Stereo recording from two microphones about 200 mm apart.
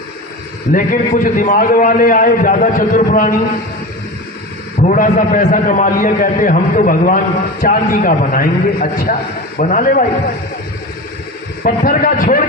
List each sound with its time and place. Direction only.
0.7 s a man's voice: 40° left (ahead or behind)
4.7 s a man's voice: 40° left (ahead or behind)
11.6 s a man's voice: 45° left (ahead or behind)